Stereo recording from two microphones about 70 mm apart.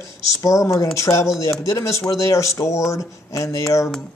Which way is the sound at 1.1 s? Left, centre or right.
Centre.